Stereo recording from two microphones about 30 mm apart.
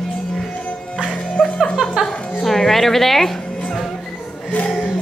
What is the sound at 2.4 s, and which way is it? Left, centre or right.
Speech, centre.